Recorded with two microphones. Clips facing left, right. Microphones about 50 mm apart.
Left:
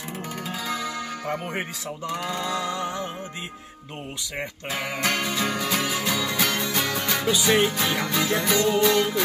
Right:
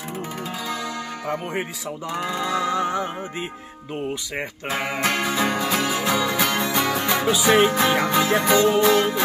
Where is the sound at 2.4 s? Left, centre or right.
Centre.